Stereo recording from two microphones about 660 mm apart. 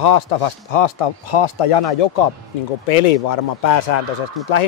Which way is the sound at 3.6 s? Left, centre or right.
Left.